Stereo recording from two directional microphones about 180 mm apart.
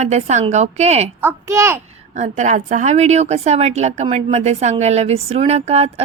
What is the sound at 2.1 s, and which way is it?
A woman's voice, 40° right (ahead or behind).